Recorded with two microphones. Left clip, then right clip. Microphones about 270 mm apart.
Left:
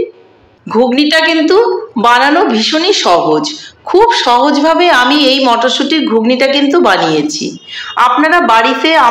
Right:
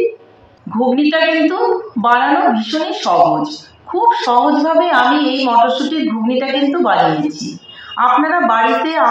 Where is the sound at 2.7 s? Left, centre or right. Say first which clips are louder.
Left 7 dB; left.